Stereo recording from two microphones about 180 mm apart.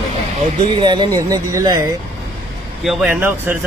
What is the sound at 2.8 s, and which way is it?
Speech, centre (ahead or behind).